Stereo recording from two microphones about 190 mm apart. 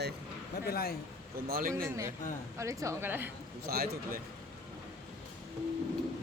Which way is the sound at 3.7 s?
55° right (ahead or behind).